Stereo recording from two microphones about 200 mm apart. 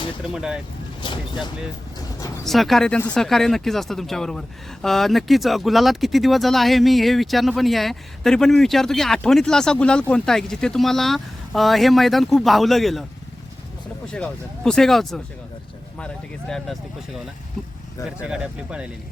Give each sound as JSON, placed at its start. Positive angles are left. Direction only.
{"t": 0.3, "sound": "speech", "side_deg": -5}
{"t": 1.0, "sound": "speech", "side_deg": 25}
{"t": 2.4, "sound": "speech", "side_deg": 0}
{"t": 14.1, "sound": "speech", "side_deg": 5}
{"t": 16.5, "sound": "speech", "side_deg": 0}
{"t": 18.2, "sound": "speech", "side_deg": -5}